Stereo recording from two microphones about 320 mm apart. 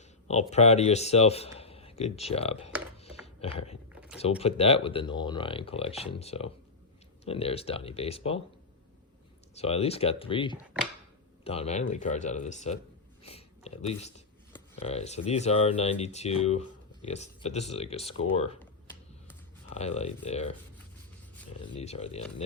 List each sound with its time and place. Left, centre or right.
0.5 s speech: left
3.0 s a sound: centre
4.2 s speech: centre
9.6 s speech: centre
19.7 s speech: centre
21.8 s speech: centre